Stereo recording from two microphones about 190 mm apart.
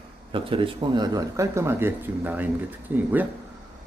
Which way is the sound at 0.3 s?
25° right (ahead or behind).